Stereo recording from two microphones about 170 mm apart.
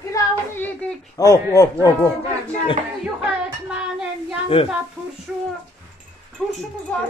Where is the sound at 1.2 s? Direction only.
20° left (ahead or behind).